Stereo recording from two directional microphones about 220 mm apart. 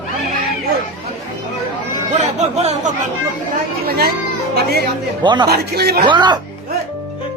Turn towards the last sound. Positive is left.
turn(degrees=-20)  # may be behind; listen again after turning